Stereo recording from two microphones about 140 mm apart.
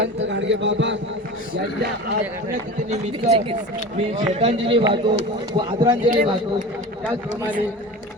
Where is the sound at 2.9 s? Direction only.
50° right (ahead or behind).